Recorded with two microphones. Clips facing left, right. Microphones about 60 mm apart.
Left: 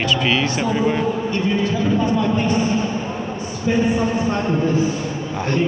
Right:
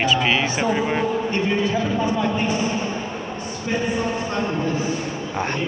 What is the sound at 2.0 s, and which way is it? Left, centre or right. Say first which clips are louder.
Speech: left 3 dB; centre.